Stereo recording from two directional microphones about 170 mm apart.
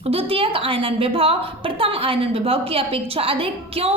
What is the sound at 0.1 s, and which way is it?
A woman's voice, 35° right (ahead or behind).